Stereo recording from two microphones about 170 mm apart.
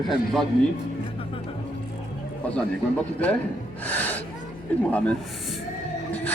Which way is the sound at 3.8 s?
10° left (ahead or behind).